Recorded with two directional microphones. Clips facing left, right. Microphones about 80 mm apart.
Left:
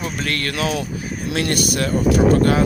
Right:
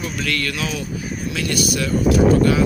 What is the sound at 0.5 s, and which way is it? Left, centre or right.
Speech, left.